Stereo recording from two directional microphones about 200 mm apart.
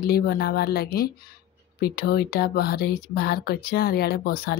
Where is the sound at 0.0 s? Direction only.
50° left (ahead or behind).